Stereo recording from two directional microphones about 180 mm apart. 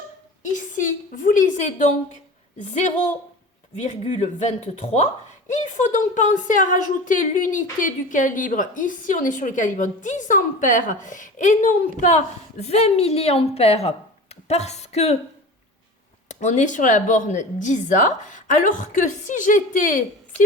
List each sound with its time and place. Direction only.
0.5 s a woman's voice: 45° left (ahead or behind)
3.8 s a woman's voice: 40° left (ahead or behind)
16.3 s a woman's voice: 40° left (ahead or behind)